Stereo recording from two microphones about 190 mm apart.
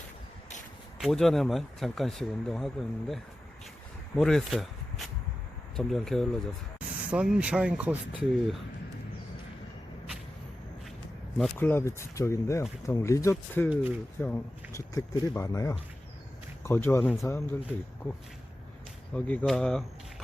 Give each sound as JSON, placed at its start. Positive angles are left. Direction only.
{"t": 1.0, "sound": "speech", "side_deg": 0}
{"t": 11.3, "sound": "speech", "side_deg": 5}
{"t": 13.7, "sound": "speech", "side_deg": -10}
{"t": 14.2, "sound": "speech", "side_deg": 10}
{"t": 19.1, "sound": "speech", "side_deg": 5}